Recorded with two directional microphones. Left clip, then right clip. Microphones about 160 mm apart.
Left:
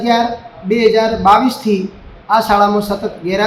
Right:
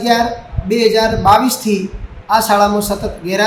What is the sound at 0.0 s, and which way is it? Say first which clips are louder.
A man's voice: even; 15° right (ahead or behind).